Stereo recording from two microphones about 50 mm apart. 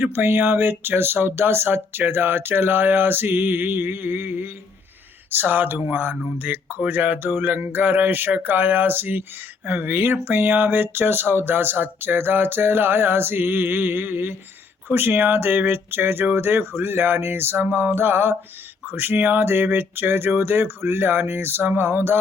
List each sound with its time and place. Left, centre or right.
0.0 s speech: right
5.3 s a sound: right
9.6 s speech: right